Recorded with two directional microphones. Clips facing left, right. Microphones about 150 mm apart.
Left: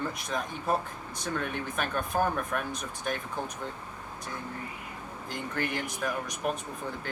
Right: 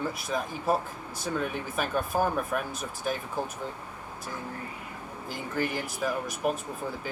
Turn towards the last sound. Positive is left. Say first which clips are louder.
# right 3 dB
turn(degrees=-5)  # may be behind; listen again after turning